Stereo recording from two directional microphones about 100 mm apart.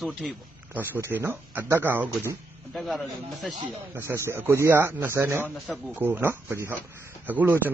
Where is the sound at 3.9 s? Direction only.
25° right (ahead or behind).